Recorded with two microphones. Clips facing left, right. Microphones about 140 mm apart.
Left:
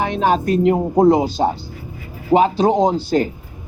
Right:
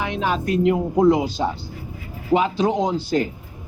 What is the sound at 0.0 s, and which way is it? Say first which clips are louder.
A man's voice: left 6 dB; 35° left (ahead or behind).